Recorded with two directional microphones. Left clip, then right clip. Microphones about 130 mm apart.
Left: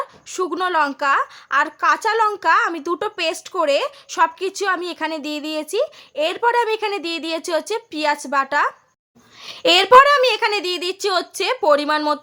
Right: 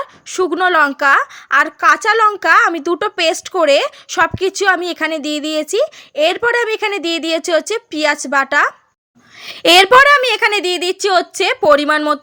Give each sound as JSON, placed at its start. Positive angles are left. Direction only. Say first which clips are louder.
{"t": 0.3, "sound": "a woman's voice", "louder": "right 8 dB", "side_deg": -25}